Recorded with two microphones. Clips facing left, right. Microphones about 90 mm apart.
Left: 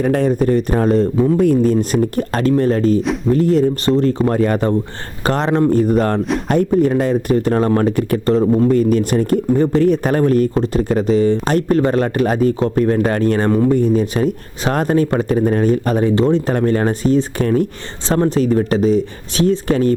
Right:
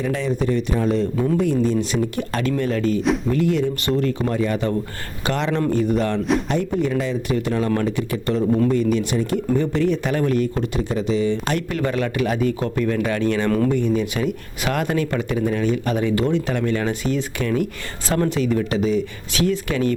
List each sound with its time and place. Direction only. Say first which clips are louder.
0.0 s speech: left 7 dB; 50° left (ahead or behind); by 4.4 s 35° left (ahead or behind)
4.4 s speech: left 6 dB; 45° left (ahead or behind)